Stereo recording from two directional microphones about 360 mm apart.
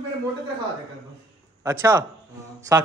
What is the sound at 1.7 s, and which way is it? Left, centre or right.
Speech, centre.